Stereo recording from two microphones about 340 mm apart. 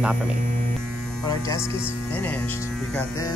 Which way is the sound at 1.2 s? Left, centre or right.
Centre.